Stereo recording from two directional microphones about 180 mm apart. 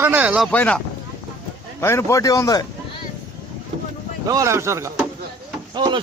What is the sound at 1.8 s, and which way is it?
Speech, 15° left (ahead or behind).